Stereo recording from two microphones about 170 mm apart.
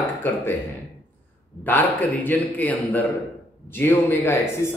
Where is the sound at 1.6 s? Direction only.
10° left (ahead or behind).